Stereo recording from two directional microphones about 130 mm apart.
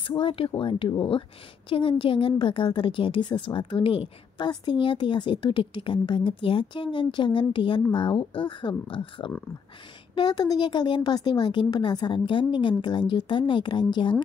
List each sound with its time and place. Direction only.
0.1 s a woman's voice: 45° left (ahead or behind)